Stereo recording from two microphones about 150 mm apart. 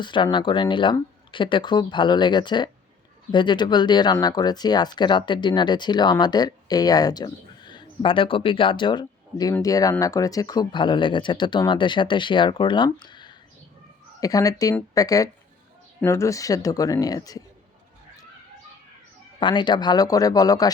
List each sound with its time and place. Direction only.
0.0 s speech: 30° left (ahead or behind)
19.4 s speech: 30° left (ahead or behind)